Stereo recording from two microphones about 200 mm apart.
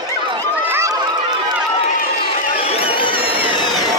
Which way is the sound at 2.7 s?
25° left (ahead or behind).